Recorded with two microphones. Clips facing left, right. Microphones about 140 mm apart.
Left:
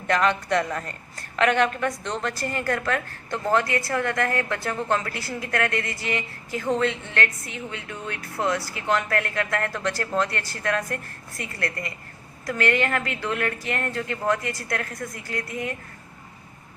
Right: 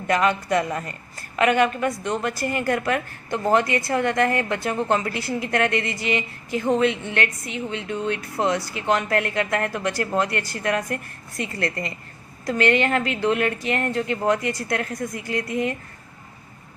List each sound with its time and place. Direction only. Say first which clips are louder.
0.1 s a woman's voice: right 1 dB; 5° right (ahead or behind)